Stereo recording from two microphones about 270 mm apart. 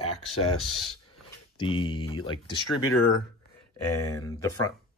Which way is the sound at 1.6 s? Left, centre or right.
Centre.